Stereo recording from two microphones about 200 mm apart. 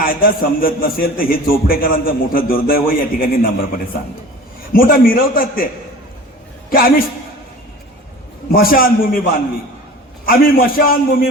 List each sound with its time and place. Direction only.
0.0 s a man's voice: 45° left (ahead or behind)
4.7 s a man's voice: 45° left (ahead or behind)
6.7 s a man's voice: 45° left (ahead or behind)
8.5 s a man's voice: 45° left (ahead or behind)
10.2 s a man's voice: 45° left (ahead or behind)